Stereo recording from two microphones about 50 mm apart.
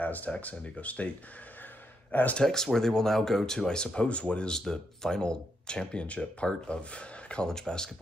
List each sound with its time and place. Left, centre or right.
0.0 s speech: left
2.4 s speech: centre